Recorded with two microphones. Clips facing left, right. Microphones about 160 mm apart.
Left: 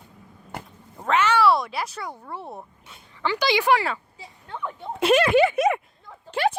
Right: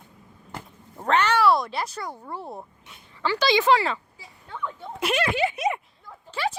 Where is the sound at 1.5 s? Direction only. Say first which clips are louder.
Even; 5° left (ahead or behind).